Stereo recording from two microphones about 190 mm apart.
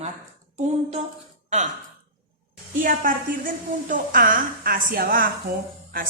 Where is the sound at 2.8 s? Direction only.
45° right (ahead or behind).